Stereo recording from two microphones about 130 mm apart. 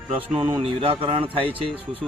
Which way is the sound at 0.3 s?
40° right (ahead or behind).